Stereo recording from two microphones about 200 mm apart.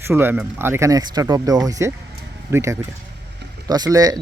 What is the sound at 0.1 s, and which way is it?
Speech, 10° right (ahead or behind).